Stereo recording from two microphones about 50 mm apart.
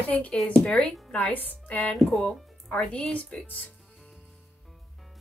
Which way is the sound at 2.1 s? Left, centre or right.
Centre.